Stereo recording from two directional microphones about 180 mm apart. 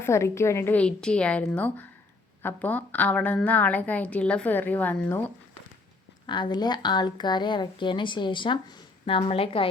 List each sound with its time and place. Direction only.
0.0 s a woman's voice: 15° left (ahead or behind)
6.2 s a woman's voice: 25° left (ahead or behind)